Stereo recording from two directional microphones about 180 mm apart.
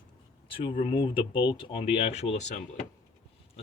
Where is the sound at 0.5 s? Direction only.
30° left (ahead or behind).